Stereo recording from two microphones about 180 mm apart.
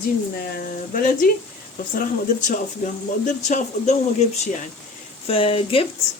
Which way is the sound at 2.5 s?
45° left (ahead or behind).